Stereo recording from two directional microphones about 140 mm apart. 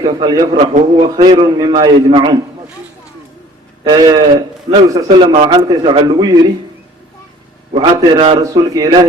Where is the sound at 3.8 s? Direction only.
30° right (ahead or behind).